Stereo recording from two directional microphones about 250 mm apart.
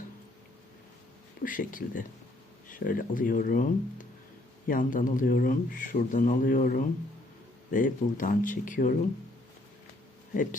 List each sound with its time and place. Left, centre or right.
1.4 s speech: left